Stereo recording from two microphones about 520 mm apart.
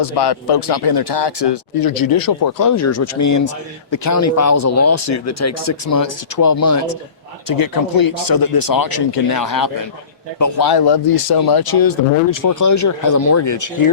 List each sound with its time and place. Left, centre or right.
0.0 s speech: left